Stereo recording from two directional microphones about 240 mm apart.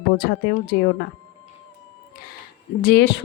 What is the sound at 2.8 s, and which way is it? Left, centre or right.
Speech, left.